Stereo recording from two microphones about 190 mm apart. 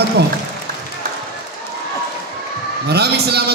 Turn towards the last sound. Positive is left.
turn(degrees=-60)  # may be behind; listen again after turning